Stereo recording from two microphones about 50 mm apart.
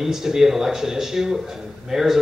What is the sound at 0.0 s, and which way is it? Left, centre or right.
A man's voice, centre.